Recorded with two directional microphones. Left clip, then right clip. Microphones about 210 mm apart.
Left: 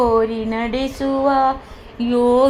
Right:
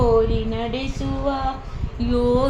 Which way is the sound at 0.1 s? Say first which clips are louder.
Left 2 dB; 30° left (ahead or behind).